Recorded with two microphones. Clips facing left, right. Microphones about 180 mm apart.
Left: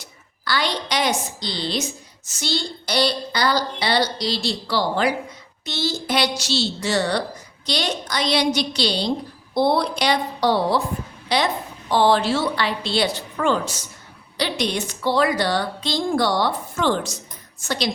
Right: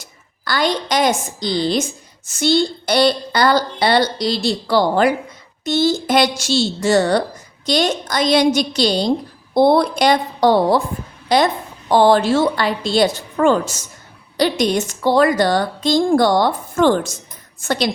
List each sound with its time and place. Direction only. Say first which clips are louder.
0.0 s a woman's voice: right 1 dB; 45° right (ahead or behind)